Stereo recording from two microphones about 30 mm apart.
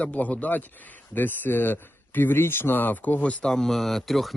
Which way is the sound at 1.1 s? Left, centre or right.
Left.